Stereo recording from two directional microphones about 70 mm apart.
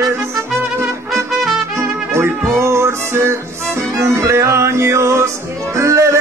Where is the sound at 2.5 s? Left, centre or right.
Right.